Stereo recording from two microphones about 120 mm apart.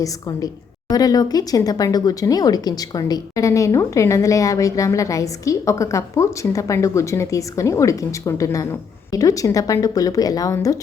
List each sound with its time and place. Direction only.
0.0 s a woman's voice: 30° left (ahead or behind)